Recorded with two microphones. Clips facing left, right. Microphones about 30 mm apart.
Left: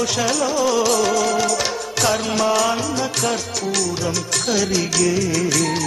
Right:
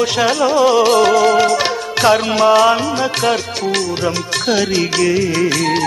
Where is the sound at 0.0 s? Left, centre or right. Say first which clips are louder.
Right 6 dB; right.